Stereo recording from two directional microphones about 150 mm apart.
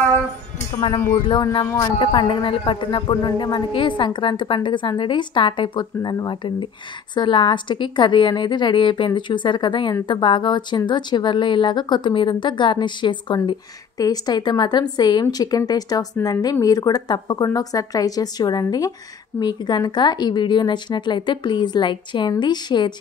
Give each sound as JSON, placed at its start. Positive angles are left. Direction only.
{"t": 1.2, "sound": "a man's voice", "side_deg": 30}